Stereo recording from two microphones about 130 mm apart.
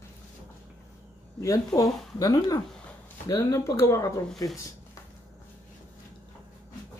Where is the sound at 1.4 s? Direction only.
25° left (ahead or behind).